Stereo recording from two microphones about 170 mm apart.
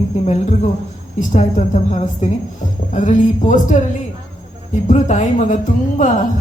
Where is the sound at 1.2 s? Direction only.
45° left (ahead or behind).